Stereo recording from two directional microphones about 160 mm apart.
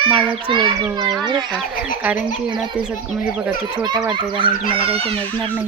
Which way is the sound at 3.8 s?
25° right (ahead or behind).